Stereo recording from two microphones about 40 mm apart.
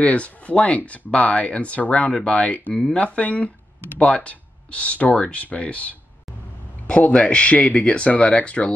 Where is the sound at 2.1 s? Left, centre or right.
Left.